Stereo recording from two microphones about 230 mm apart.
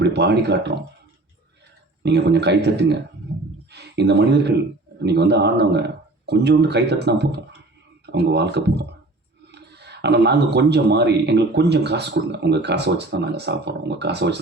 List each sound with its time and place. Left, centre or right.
0.0 s speech: right
2.0 s speech: right